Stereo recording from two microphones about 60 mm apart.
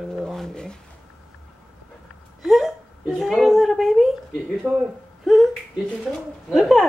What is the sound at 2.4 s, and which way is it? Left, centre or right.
Hiccup, centre.